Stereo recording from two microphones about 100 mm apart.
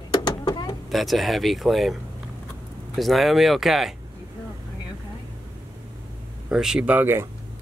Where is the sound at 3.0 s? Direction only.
Centre (ahead or behind).